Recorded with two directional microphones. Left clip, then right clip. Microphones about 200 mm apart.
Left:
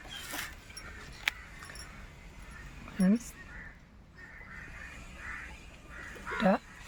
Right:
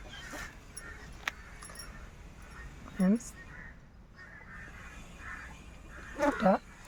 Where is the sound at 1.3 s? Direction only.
35° right (ahead or behind).